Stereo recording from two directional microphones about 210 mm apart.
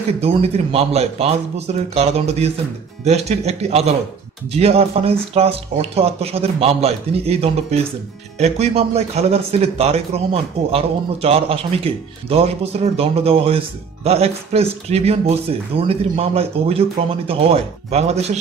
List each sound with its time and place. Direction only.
0.2 s speech: 30° right (ahead or behind)